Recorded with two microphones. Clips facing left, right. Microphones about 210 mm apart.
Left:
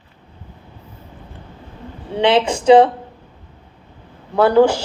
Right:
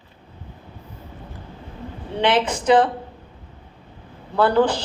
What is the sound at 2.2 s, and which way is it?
Speech, 25° left (ahead or behind).